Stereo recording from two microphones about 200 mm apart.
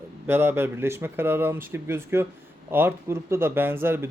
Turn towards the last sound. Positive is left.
turn(degrees=-10)  # may be behind; listen again after turning